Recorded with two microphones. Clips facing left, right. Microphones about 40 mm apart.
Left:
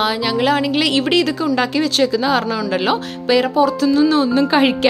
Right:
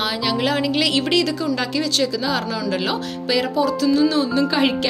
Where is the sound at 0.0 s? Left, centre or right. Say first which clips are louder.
Left 4 dB; centre.